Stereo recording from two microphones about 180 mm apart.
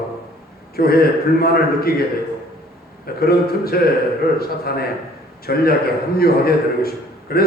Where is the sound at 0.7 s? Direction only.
60° left (ahead or behind).